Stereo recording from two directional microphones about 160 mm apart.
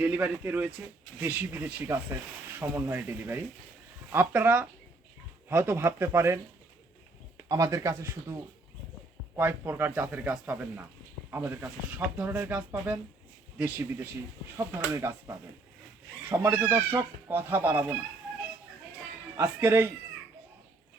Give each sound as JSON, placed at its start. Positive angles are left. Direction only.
{"t": 0.0, "sound": "speech", "side_deg": -10}
{"t": 7.4, "sound": "speech", "side_deg": -20}
{"t": 19.4, "sound": "speech", "side_deg": -15}